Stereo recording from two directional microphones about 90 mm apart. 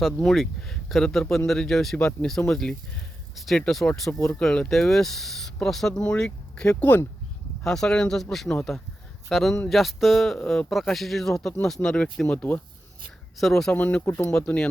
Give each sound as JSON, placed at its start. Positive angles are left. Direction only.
{"t": 0.2, "sound": "speech", "side_deg": 5}
{"t": 7.6, "sound": "speech", "side_deg": 5}
{"t": 13.7, "sound": "speech", "side_deg": 20}